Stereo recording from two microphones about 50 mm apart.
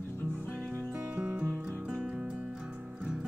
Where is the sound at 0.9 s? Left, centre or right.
Right.